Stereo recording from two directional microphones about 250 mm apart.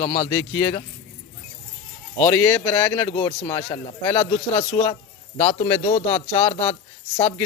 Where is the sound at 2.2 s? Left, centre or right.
Centre; by 6.7 s left.